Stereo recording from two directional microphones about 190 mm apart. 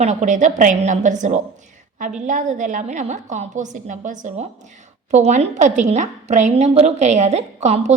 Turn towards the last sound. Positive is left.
turn(degrees=-35)  # may be behind; listen again after turning